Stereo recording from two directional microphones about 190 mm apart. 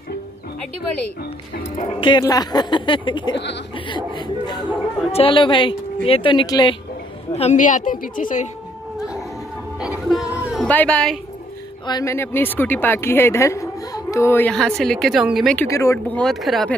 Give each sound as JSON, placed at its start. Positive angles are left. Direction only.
{"t": 1.8, "sound": "speech", "side_deg": 30}
{"t": 7.3, "sound": "a woman's voice", "side_deg": 40}
{"t": 9.8, "sound": "music", "side_deg": 0}
{"t": 10.7, "sound": "speech", "side_deg": 5}
{"t": 11.8, "sound": "speech", "side_deg": 20}
{"t": 15.6, "sound": "speech", "side_deg": 15}